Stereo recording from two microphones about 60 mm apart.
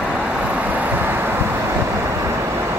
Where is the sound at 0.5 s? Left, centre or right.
Right.